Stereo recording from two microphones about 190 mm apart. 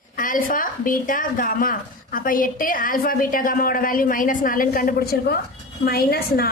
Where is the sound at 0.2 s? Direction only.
45° left (ahead or behind).